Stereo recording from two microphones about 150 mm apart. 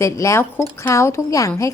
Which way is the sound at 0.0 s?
20° left (ahead or behind).